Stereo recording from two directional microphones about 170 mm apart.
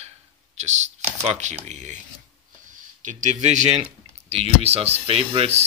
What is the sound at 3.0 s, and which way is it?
Speech, 50° right (ahead or behind).